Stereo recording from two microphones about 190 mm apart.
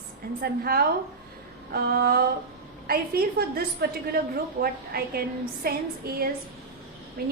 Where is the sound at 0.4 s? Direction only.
50° right (ahead or behind).